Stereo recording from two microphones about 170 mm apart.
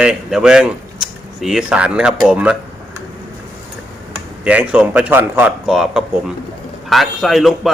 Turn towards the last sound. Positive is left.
turn(degrees=0)  # may be behind; listen again after turning